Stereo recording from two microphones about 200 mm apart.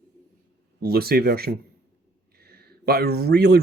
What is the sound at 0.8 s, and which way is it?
Speech, 50° right (ahead or behind).